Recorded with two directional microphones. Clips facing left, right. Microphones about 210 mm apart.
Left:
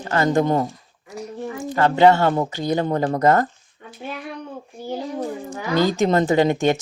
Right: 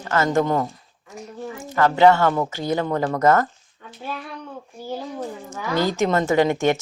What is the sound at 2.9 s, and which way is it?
Speech, 30° left (ahead or behind).